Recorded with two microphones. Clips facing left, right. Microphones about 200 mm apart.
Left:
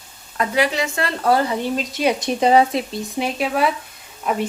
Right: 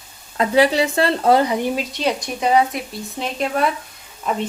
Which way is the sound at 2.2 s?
30° left (ahead or behind).